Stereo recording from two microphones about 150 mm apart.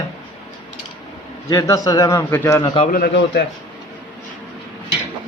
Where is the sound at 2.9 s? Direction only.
80° left.